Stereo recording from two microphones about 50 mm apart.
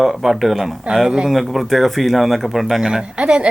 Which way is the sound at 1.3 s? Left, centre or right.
Centre.